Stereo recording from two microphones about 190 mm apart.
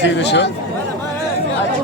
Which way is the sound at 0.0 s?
65° left (ahead or behind).